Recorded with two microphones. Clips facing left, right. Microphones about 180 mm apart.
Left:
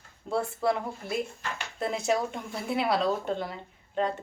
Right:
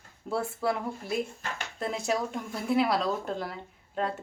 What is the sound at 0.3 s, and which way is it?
A woman's voice, 5° right (ahead or behind).